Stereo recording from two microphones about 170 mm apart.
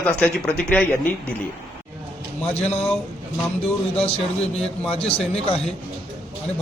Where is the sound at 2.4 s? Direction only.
40° left (ahead or behind).